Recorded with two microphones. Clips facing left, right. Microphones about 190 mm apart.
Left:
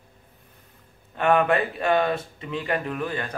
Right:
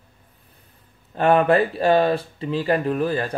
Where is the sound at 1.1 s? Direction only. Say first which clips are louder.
Right 4 dB; 35° right (ahead or behind).